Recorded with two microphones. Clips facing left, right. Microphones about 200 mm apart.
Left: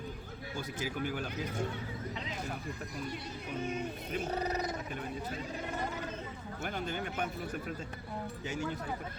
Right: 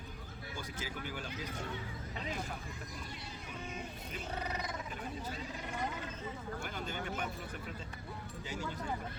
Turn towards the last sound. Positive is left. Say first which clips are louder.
# left 3 dB
turn(degrees=50)  # may be behind; listen again after turning